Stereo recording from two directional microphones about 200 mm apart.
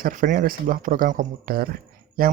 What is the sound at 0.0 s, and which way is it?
A man's voice, 40° right (ahead or behind).